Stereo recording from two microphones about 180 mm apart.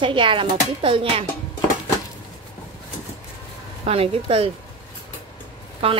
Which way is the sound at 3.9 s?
30° right (ahead or behind).